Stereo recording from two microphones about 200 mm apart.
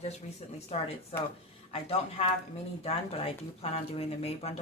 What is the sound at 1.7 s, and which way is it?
Speech, 30° left (ahead or behind).